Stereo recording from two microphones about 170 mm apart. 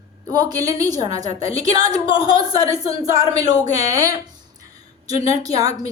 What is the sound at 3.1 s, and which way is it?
A woman's voice, 20° right (ahead or behind).